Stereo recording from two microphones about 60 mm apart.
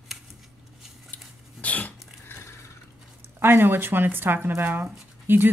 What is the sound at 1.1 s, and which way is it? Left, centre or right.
Dog, left.